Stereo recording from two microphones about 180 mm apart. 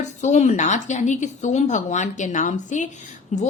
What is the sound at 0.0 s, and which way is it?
A woman's voice, 40° left (ahead or behind).